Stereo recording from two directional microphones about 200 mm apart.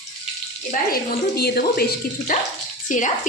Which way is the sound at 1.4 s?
50° left (ahead or behind).